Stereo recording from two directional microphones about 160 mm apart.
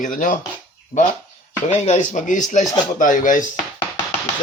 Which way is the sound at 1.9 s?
50° left (ahead or behind).